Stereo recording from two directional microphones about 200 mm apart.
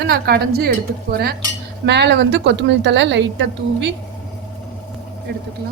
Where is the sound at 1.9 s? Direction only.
55° right (ahead or behind).